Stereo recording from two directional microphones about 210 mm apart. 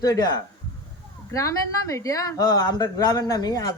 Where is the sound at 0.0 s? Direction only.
20° left (ahead or behind).